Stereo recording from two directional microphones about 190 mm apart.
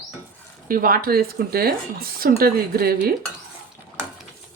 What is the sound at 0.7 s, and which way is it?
Speech, 50° right (ahead or behind).